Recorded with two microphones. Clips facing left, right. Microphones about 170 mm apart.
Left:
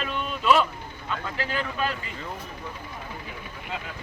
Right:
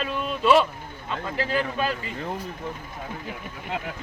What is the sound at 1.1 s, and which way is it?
Speech, 35° right (ahead or behind).